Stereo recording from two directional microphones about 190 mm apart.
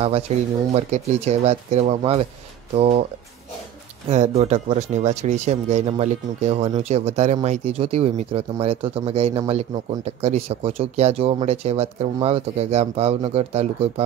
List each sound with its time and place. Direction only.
0.0 s speech: 30° right (ahead or behind)
4.1 s speech: 35° right (ahead or behind)